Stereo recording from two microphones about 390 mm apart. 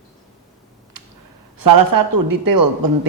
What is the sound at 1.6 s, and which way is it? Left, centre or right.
Speech, right.